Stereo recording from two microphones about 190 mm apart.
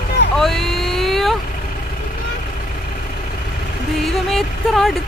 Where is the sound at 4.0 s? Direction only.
Centre (ahead or behind).